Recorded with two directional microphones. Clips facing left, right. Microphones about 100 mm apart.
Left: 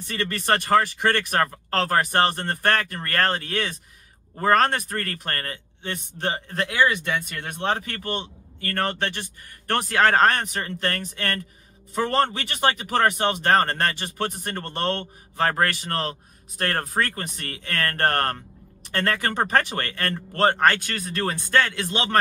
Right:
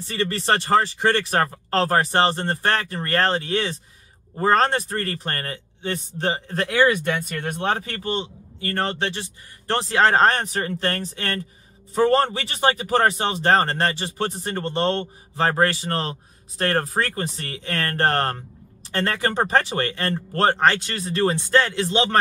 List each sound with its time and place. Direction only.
0.0 s speech: 25° right (ahead or behind)
6.6 s speech: 40° right (ahead or behind)
8.0 s speech: 20° right (ahead or behind)
12.4 s speech: 25° right (ahead or behind)